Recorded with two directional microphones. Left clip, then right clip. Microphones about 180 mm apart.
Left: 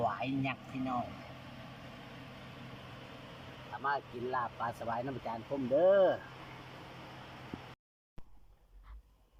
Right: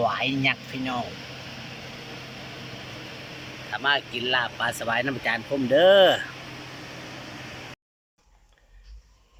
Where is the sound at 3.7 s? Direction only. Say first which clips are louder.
Right 12 dB; 30° right (ahead or behind).